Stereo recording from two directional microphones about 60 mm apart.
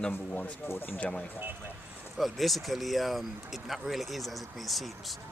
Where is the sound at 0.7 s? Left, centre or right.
Left.